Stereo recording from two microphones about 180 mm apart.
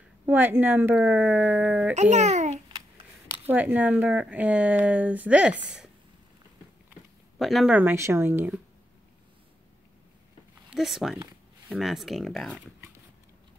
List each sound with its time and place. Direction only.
0.3 s speech: 10° right (ahead or behind)
2.0 s a child's voice: 40° right (ahead or behind)
3.4 s speech: 10° right (ahead or behind)
6.9 s speech: centre (ahead or behind)
10.7 s speech: centre (ahead or behind)